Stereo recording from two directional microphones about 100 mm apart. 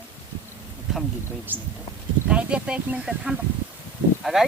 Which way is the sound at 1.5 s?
20° right (ahead or behind).